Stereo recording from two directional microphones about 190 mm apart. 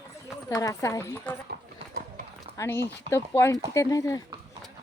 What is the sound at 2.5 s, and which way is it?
Speech, 15° left (ahead or behind).